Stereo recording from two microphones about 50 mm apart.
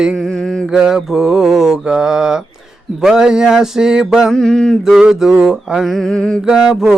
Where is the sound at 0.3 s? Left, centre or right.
Centre.